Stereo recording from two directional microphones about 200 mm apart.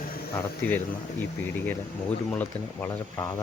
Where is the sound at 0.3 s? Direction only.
10° left (ahead or behind).